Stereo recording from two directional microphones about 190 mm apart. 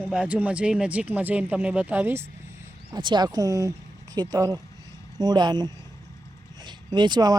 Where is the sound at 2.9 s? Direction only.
25° right (ahead or behind).